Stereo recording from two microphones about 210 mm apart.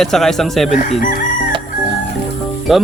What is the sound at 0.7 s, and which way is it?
Chicken, 35° left (ahead or behind).